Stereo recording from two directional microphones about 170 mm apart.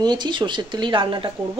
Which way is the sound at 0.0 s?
25° right (ahead or behind).